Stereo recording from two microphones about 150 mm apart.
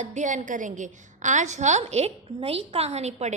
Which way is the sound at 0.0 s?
55° right (ahead or behind).